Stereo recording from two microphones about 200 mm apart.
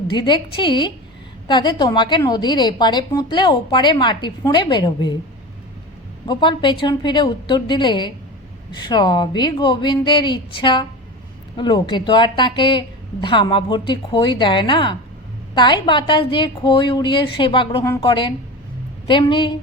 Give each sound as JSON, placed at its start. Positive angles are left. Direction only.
{"t": 0.1, "sound": "a woman's voice", "side_deg": 25}
{"t": 6.2, "sound": "a woman's voice", "side_deg": 25}